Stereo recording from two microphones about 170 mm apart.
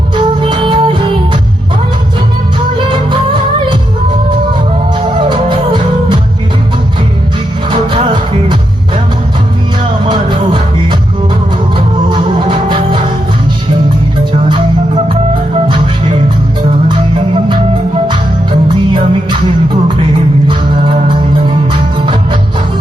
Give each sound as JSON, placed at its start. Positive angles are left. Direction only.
{"t": 0.2, "sound": "music", "side_deg": -30}
{"t": 2.9, "sound": "music", "side_deg": -30}
{"t": 4.9, "sound": "music", "side_deg": -30}
{"t": 7.7, "sound": "music", "side_deg": -30}
{"t": 10.0, "sound": "music", "side_deg": -30}
{"t": 12.0, "sound": "music", "side_deg": -30}
{"t": 14.3, "sound": "music", "side_deg": -35}
{"t": 18.7, "sound": "music", "side_deg": -30}